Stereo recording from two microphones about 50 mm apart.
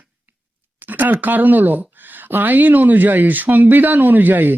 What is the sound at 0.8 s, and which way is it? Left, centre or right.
A woman's voice, right.